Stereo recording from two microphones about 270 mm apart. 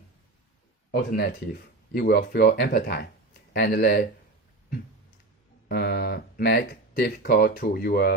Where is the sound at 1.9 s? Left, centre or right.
Left.